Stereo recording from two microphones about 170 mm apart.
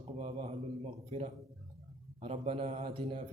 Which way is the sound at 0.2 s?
40° right (ahead or behind).